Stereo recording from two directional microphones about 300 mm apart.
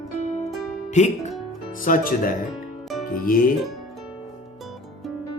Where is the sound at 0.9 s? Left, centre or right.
Left.